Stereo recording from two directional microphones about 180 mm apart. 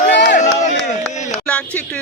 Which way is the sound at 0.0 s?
75° left (ahead or behind).